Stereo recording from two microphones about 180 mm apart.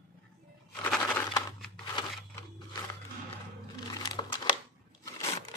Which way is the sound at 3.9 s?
25° left (ahead or behind).